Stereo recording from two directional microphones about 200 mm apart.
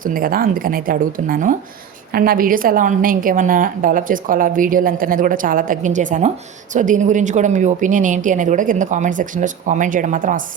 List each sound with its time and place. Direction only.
0.0 s a woman's voice: 45° right (ahead or behind)